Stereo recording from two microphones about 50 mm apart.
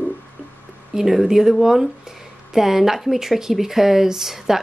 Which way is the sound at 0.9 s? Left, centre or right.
Centre.